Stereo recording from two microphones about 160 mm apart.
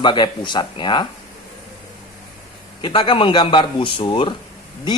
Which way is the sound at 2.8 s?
30° left (ahead or behind).